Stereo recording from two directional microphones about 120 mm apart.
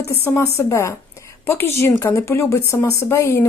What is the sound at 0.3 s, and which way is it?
A woman's voice, 25° left (ahead or behind).